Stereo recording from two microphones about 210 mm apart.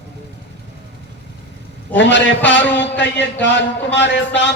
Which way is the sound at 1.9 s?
60° left (ahead or behind).